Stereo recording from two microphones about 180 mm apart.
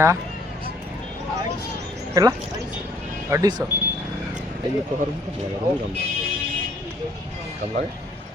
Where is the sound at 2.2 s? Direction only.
20° right (ahead or behind).